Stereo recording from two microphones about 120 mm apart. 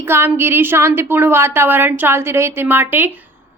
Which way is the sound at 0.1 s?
20° right (ahead or behind).